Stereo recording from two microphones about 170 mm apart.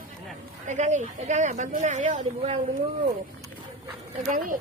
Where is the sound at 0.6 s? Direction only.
45° right (ahead or behind).